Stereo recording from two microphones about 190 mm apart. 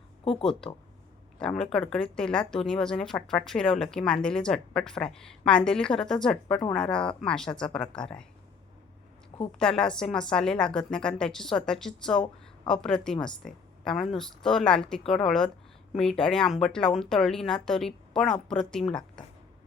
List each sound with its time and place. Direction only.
0.6 s speech: 5° left (ahead or behind)
9.6 s speech: 5° left (ahead or behind)